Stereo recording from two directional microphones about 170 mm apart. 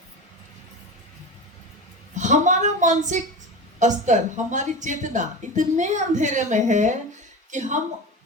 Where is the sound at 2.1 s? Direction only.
45° right (ahead or behind).